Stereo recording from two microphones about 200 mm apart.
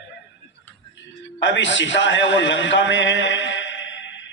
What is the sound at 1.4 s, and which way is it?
A man's voice, 65° left (ahead or behind).